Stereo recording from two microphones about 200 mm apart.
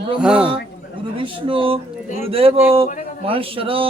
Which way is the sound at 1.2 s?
25° right (ahead or behind).